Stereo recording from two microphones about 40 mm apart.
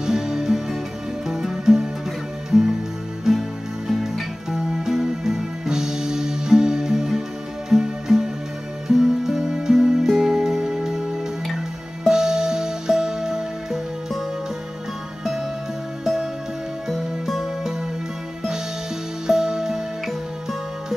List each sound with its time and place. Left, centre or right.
0.0 s music: centre
16.0 s music: centre
19.2 s music: centre